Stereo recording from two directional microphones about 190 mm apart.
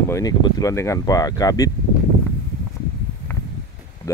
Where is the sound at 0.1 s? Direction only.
20° left (ahead or behind).